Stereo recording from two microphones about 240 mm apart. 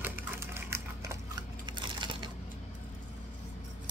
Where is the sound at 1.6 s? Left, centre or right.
Centre.